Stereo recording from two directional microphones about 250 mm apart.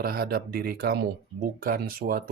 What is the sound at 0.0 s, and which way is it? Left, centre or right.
Speech, right.